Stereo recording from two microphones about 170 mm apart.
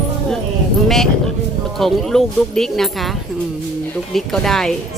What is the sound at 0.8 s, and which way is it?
Speech, centre (ahead or behind).